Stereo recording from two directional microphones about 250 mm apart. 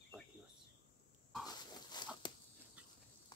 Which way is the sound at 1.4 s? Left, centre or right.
Centre.